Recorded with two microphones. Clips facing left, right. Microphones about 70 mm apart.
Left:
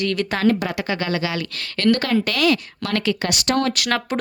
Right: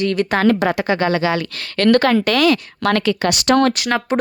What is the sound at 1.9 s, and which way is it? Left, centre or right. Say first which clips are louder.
Speech: right 5 dB; right.